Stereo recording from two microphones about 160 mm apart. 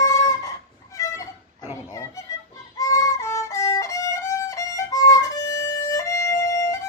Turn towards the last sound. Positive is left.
turn(degrees=20)  # may be behind; listen again after turning